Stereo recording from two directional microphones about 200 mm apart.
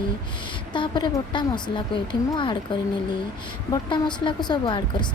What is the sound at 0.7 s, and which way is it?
Speech, 25° left (ahead or behind).